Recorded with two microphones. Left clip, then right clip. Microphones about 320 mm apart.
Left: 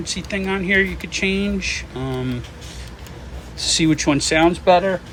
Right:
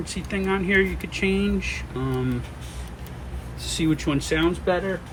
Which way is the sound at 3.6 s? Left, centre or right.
Centre.